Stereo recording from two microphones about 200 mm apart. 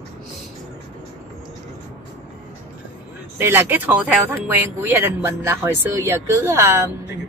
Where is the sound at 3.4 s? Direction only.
10° right (ahead or behind).